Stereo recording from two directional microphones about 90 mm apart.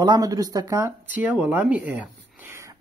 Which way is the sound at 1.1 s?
20° right (ahead or behind).